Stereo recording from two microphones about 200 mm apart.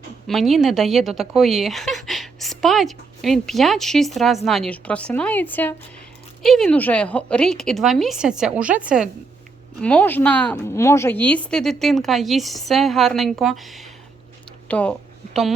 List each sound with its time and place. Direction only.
0.3 s a woman's voice: centre (ahead or behind)
9.8 s a woman's voice: 5° left (ahead or behind)
14.7 s a sound: 5° left (ahead or behind)